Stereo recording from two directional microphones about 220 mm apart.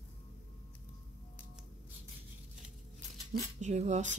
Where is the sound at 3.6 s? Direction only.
30° right (ahead or behind).